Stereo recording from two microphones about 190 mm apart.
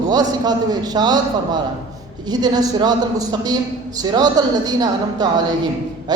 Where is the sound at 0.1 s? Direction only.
20° right (ahead or behind).